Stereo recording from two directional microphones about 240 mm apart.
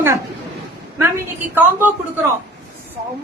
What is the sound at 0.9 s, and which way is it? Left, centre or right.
Speech, centre.